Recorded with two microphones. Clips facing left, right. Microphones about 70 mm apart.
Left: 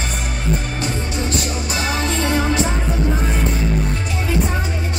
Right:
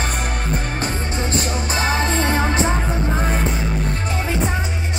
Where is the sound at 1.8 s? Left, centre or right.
Right.